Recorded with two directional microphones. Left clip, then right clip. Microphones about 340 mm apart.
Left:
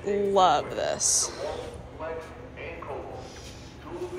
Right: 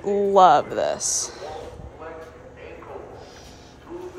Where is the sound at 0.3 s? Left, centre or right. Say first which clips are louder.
Right 7 dB; centre.